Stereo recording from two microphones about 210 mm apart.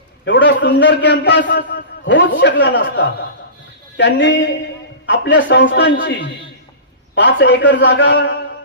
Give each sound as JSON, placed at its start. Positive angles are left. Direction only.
{"t": 0.3, "sound": "a man's voice", "side_deg": 60}